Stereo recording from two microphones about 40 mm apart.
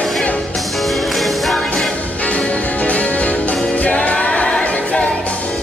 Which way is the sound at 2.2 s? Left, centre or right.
Left.